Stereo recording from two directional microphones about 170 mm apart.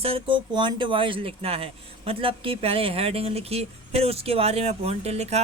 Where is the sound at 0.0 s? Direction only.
30° right (ahead or behind).